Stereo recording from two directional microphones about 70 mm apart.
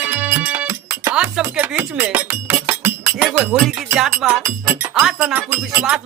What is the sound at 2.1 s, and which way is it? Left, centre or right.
Music, right.